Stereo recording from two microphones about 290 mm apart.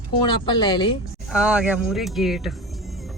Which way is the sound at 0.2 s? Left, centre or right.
Centre.